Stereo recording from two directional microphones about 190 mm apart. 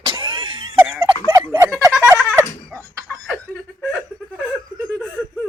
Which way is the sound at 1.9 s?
10° right (ahead or behind).